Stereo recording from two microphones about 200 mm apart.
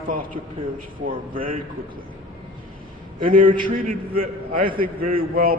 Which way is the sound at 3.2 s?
45° right (ahead or behind).